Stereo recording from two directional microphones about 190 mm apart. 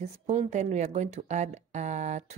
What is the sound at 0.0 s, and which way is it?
Speech, 35° right (ahead or behind).